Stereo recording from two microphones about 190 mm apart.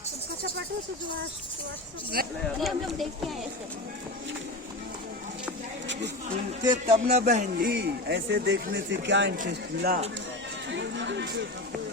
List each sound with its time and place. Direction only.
2.2 s speech: 50° right (ahead or behind)
2.6 s speech: centre (ahead or behind)
6.6 s speech: 20° right (ahead or behind)
7.1 s speech: 45° right (ahead or behind)
7.7 s speech: 60° right (ahead or behind)
9.5 s speech: 55° right (ahead or behind)
10.7 s a sound: 70° right (ahead or behind)